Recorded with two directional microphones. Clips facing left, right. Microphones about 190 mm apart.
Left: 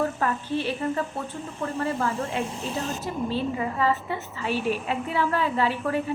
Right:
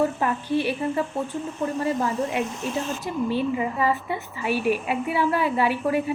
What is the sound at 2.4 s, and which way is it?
Speech, 35° left (ahead or behind).